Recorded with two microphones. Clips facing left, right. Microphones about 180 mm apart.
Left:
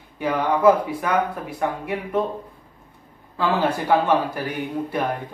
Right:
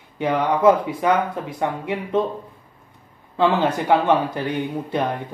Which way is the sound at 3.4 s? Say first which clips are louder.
Right 3 dB; 25° right (ahead or behind).